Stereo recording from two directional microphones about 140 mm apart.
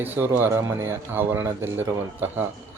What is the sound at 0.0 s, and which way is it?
A man's voice, 15° right (ahead or behind).